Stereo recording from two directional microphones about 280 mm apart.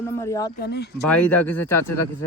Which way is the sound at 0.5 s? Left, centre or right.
Left.